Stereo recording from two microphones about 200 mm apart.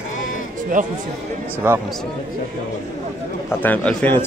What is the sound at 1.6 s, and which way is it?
Speech, 10° right (ahead or behind).